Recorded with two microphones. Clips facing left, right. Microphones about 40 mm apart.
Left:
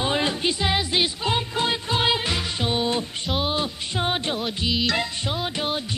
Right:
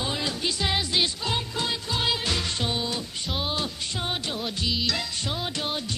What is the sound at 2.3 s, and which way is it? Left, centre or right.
Music, centre.